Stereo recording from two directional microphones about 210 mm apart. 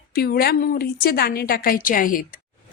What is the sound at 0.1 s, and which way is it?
A woman's voice, 45° left (ahead or behind).